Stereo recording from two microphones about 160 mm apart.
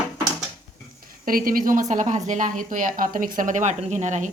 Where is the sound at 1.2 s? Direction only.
65° right (ahead or behind).